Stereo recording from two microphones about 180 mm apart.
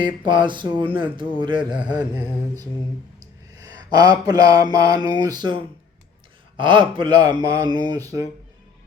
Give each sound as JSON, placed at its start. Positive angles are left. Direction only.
{"t": 0.0, "sound": "a man's voice", "side_deg": -25}
{"t": 1.8, "sound": "mantra", "side_deg": -5}
{"t": 3.6, "sound": "a sound", "side_deg": -20}
{"t": 4.3, "sound": "a man's voice", "side_deg": -20}